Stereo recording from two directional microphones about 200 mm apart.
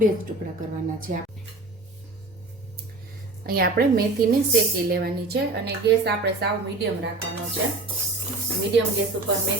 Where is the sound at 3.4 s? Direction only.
50° right (ahead or behind).